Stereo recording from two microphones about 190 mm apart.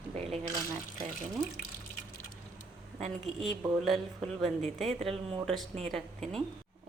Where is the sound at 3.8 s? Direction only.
Centre (ahead or behind).